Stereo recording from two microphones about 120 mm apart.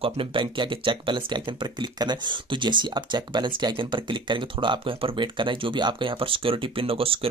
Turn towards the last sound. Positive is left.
turn(degrees=-50)  # may be behind; listen again after turning